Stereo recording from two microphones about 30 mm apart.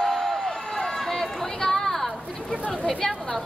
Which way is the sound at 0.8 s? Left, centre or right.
Centre.